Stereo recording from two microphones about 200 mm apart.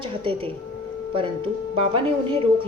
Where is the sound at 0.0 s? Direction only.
25° right (ahead or behind).